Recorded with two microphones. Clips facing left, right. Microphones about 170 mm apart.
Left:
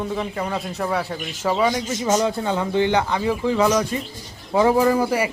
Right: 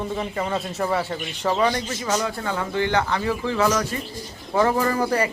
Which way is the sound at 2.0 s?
25° left (ahead or behind).